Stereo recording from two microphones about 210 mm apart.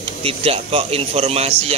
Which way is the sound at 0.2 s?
25° right (ahead or behind).